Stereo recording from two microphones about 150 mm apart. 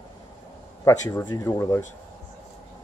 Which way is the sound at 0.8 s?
15° left (ahead or behind).